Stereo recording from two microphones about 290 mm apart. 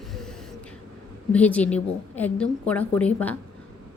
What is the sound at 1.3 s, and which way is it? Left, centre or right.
Speech, centre.